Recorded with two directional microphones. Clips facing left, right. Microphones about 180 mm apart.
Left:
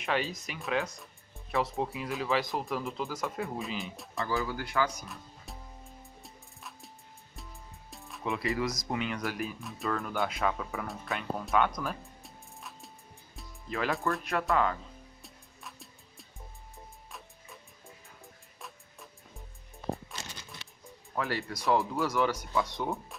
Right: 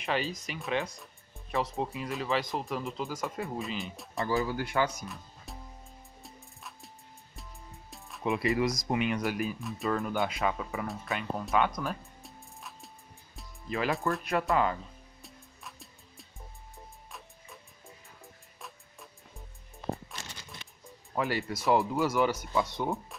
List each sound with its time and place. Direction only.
0.0 s speech: centre (ahead or behind)
4.5 s speech: 25° right (ahead or behind)
5.0 s music: centre (ahead or behind)
7.9 s music: centre (ahead or behind)
8.2 s speech: 20° right (ahead or behind)
9.4 s speech: centre (ahead or behind)
9.8 s speech: 10° right (ahead or behind)
15.2 s music: centre (ahead or behind)
21.1 s speech: 15° right (ahead or behind); by 23.1 s centre (ahead or behind)